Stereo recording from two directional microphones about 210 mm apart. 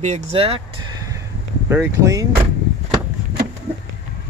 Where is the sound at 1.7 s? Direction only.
15° right (ahead or behind).